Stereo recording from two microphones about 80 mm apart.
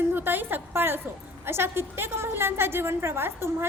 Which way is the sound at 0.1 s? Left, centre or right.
Right.